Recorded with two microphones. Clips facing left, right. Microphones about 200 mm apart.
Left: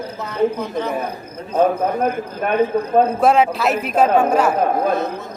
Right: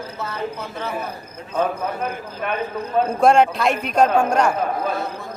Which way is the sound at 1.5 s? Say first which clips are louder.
Left 6 dB; 50° left (ahead or behind).